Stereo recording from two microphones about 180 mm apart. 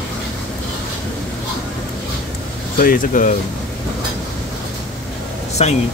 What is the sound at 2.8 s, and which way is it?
Speech, 50° left (ahead or behind).